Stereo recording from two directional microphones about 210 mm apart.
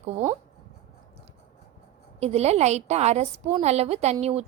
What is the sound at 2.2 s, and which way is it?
A woman's voice, 30° right (ahead or behind).